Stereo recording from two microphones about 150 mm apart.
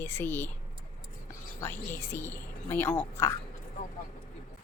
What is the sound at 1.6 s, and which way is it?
A woman's voice, 15° left (ahead or behind).